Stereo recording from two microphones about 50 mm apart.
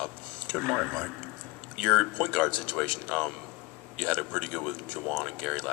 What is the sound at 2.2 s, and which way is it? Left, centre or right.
Speech, left.